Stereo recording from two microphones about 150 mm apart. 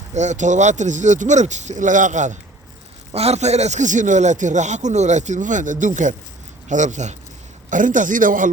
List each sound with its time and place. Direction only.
0.1 s a man's voice: 50° right (ahead or behind)
3.1 s a man's voice: 45° right (ahead or behind); by 8.4 s 60° right (ahead or behind)